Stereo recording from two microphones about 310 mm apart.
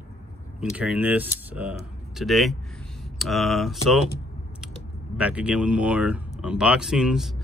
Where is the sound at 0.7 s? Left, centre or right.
Centre.